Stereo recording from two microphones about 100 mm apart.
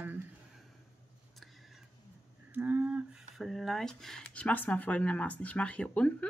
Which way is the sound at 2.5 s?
15° right (ahead or behind).